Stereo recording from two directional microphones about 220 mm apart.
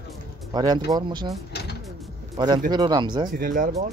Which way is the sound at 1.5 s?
45° left (ahead or behind).